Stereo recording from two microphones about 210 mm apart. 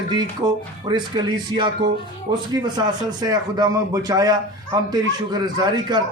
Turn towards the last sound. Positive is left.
turn(degrees=-20)  # may be behind; listen again after turning